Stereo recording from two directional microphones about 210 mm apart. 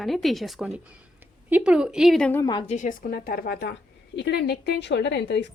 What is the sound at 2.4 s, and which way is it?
Speech, 20° left (ahead or behind).